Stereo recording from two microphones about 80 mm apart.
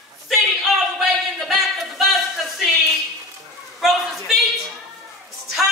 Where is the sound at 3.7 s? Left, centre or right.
Centre.